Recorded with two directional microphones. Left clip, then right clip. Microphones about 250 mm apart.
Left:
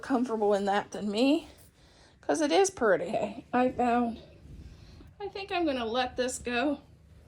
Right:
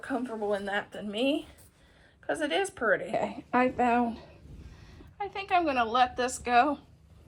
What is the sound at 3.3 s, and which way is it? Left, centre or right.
Speech, centre.